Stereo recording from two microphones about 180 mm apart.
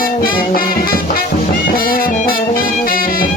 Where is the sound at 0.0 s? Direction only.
55° left (ahead or behind).